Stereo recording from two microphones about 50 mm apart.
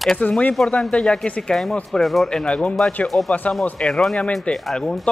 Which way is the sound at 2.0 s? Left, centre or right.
Centre.